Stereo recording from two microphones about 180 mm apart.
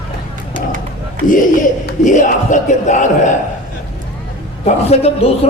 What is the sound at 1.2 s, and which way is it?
Speech, 45° left (ahead or behind).